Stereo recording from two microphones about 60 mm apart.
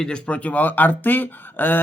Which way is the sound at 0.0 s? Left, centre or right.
Centre.